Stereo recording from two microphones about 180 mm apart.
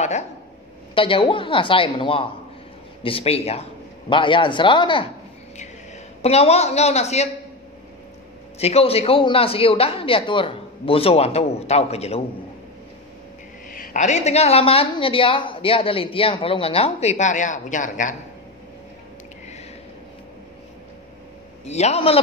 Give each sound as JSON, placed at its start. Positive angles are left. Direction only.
{"t": 0.9, "sound": "a woman's voice", "side_deg": 30}
{"t": 6.2, "sound": "a woman's voice", "side_deg": 35}
{"t": 8.5, "sound": "a woman's voice", "side_deg": 35}
{"t": 13.7, "sound": "a woman's voice", "side_deg": 45}
{"t": 21.6, "sound": "a woman's voice", "side_deg": 40}